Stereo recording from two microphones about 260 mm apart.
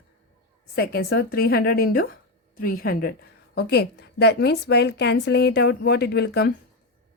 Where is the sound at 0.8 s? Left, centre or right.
Left.